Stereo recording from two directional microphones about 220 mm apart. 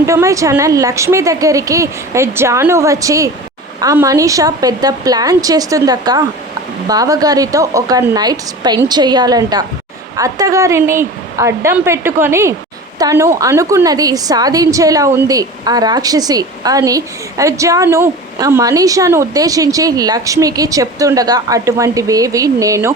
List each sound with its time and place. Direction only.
0.0 s a woman's voice: 15° right (ahead or behind)